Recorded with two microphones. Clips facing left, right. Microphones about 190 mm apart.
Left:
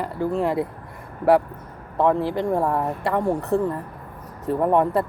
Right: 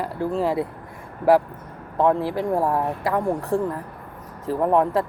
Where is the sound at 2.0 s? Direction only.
Centre (ahead or behind).